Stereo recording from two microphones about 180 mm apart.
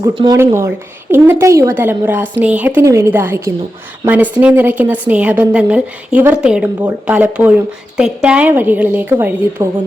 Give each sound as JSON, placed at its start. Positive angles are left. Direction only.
{"t": 0.0, "sound": "a woman's voice", "side_deg": -25}